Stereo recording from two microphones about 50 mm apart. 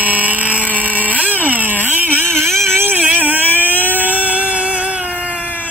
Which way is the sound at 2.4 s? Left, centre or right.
Right.